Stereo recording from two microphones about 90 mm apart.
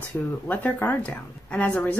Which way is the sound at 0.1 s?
30° left (ahead or behind).